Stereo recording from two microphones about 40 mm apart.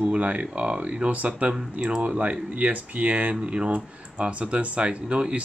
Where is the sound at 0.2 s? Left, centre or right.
Right.